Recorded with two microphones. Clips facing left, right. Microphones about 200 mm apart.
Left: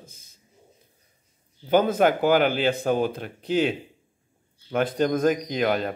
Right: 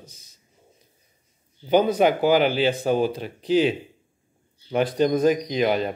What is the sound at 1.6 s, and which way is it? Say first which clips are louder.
Speech: right 1 dB; 10° right (ahead or behind).